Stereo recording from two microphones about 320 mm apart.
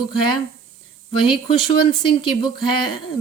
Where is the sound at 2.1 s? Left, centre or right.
Centre.